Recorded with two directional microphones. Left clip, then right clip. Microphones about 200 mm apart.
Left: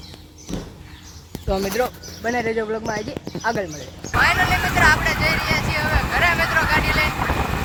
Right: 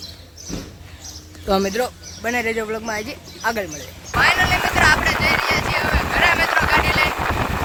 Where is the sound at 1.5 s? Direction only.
50° right (ahead or behind).